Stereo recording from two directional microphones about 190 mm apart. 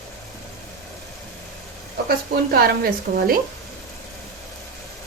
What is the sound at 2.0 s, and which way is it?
Speech, 55° right (ahead or behind).